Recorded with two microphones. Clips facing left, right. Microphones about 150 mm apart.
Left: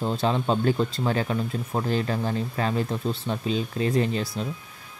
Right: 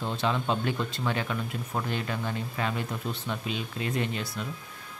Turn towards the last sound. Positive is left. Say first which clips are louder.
# left 6 dB
turn(degrees=35)  # may be behind; listen again after turning